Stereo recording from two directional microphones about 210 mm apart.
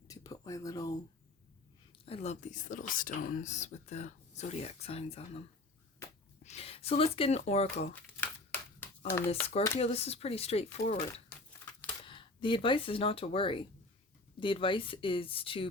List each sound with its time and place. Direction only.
0.1 s speech: 15° left (ahead or behind)
2.0 s speech: 30° left (ahead or behind)
8.8 s a sound: 10° left (ahead or behind)
9.3 s speech: 30° left (ahead or behind)
12.0 s speech: 25° left (ahead or behind)